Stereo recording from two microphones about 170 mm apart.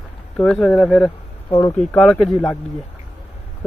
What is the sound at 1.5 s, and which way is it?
Speech, 25° left (ahead or behind).